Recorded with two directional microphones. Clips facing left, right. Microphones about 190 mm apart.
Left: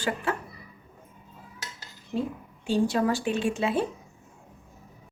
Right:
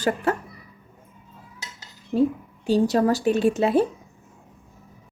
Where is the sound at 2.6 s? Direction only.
40° right (ahead or behind).